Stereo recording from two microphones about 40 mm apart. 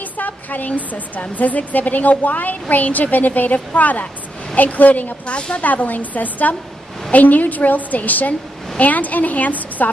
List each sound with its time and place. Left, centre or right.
0.2 s a woman's voice: left
5.2 s a woman's voice: left
5.6 s a woman's voice: left